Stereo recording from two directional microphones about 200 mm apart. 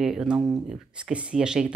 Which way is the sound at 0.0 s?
Centre (ahead or behind).